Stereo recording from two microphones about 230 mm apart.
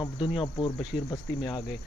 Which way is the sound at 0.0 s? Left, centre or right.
Left.